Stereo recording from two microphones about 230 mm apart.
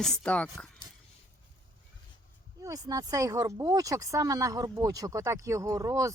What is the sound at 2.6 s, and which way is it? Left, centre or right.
Speech, centre.